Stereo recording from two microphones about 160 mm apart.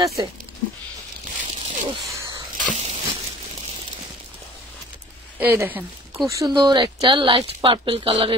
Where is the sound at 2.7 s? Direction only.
40° right (ahead or behind).